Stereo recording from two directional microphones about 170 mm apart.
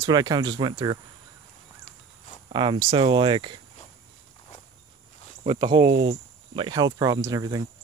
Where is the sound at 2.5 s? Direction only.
30° right (ahead or behind).